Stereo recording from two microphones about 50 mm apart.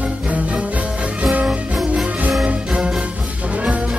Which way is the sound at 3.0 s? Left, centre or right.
Right.